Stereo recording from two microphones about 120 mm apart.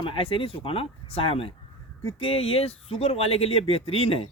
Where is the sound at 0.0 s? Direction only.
45° left (ahead or behind).